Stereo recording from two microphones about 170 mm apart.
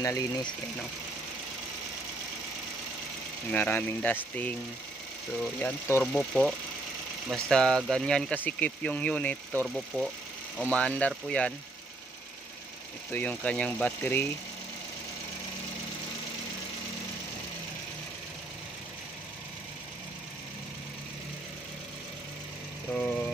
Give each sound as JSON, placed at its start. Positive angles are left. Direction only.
{"t": 0.0, "sound": "speech", "side_deg": 20}
{"t": 3.5, "sound": "speech", "side_deg": 10}
{"t": 7.2, "sound": "speech", "side_deg": 0}
{"t": 13.1, "sound": "speech", "side_deg": 10}
{"t": 22.9, "sound": "vehicle", "side_deg": 5}